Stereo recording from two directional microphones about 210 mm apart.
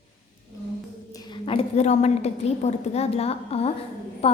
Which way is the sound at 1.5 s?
30° left (ahead or behind).